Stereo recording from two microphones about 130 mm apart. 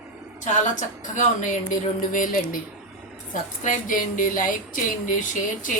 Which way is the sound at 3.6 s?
80° left.